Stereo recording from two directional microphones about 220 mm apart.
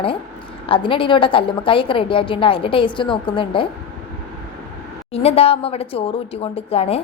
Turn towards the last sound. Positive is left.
turn(degrees=25)  # may be behind; listen again after turning